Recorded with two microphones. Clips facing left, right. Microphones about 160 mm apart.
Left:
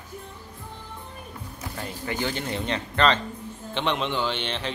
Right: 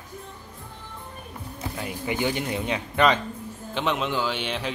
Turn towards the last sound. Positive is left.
turn(degrees=-10)  # may be behind; listen again after turning